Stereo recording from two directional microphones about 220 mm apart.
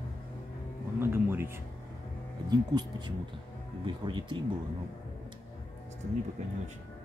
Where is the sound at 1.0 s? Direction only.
10° right (ahead or behind).